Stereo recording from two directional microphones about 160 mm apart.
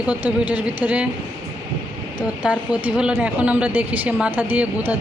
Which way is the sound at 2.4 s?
10° right (ahead or behind).